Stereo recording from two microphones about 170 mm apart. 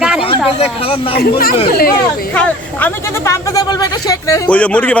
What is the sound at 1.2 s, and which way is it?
Speech, 60° left (ahead or behind).